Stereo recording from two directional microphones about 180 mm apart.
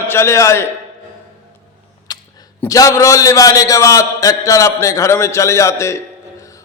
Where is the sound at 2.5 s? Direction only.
20° left (ahead or behind).